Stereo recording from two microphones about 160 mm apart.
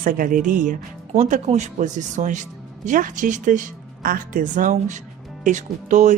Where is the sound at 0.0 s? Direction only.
55° right (ahead or behind).